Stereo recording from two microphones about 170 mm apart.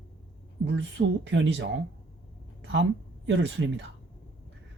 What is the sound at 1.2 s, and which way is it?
Speech, 90° right.